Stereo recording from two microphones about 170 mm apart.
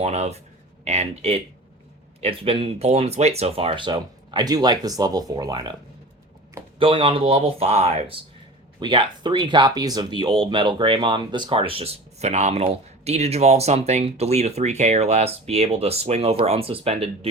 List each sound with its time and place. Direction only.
0.0 s speech: 40° right (ahead or behind); by 5.7 s 25° right (ahead or behind)
6.7 s speech: 30° right (ahead or behind)